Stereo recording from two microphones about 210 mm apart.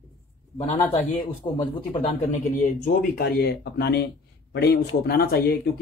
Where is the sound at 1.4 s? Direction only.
25° left (ahead or behind).